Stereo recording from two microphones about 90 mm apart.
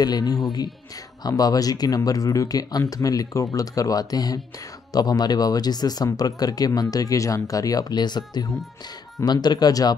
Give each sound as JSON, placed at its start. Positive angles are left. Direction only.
{"t": 0.0, "sound": "speech", "side_deg": 45}